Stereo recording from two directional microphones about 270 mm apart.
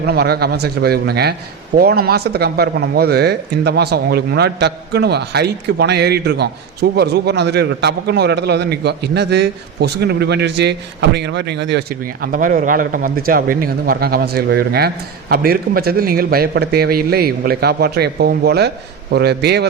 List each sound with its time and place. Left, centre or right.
0.0 s a man's voice: right